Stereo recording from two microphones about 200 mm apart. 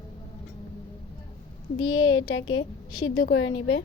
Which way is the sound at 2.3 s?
90° left.